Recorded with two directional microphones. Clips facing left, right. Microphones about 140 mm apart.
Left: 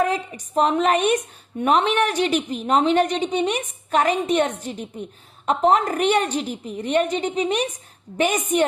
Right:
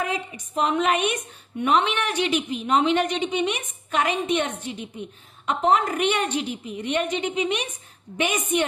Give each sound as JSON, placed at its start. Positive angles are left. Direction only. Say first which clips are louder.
{"t": 0.0, "sound": "a woman's voice", "louder": "left 6 dB", "side_deg": 40}